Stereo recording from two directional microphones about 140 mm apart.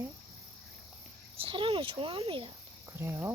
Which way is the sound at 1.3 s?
40° right (ahead or behind).